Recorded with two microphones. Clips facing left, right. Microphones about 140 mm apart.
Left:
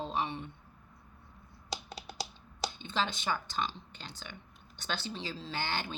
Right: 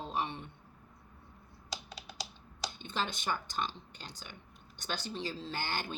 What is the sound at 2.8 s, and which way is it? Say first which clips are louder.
Speech: left 2 dB; 50° right (ahead or behind).